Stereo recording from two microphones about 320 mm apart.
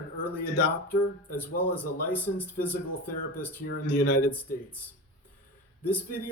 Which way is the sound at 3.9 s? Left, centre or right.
Left.